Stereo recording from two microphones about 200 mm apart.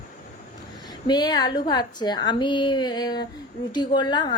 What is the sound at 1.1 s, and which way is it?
A woman's voice, 20° left (ahead or behind).